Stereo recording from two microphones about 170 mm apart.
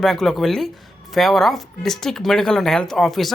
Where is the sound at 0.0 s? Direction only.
Centre (ahead or behind).